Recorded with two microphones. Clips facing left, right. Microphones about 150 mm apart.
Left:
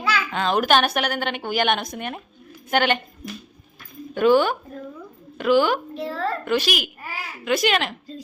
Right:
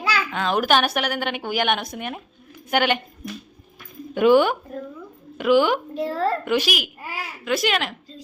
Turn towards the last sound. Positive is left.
turn(degrees=0)  # may be behind; listen again after turning